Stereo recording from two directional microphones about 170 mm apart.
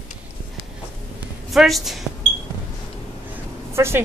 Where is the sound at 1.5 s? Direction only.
Centre (ahead or behind).